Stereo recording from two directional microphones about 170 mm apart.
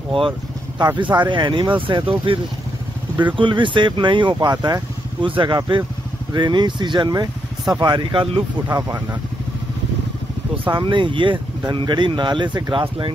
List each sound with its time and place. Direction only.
0.7 s speech: 25° right (ahead or behind)
10.6 s speech: 30° right (ahead or behind)